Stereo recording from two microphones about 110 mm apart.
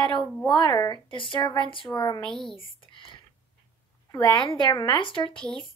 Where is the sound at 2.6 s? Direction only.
50° left (ahead or behind).